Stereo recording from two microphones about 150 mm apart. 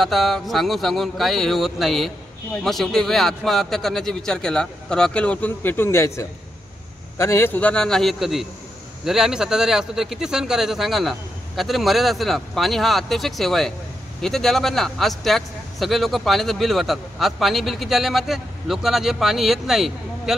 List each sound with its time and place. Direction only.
0.0 s speech: centre (ahead or behind)